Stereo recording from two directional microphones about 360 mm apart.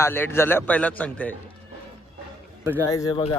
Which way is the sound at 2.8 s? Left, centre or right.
Centre.